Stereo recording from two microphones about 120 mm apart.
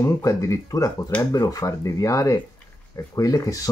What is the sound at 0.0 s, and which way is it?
Speech, 25° left (ahead or behind).